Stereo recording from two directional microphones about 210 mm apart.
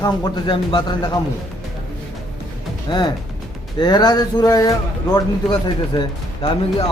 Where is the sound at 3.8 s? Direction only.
20° left (ahead or behind).